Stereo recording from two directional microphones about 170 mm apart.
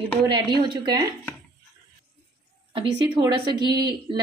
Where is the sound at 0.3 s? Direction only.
25° right (ahead or behind).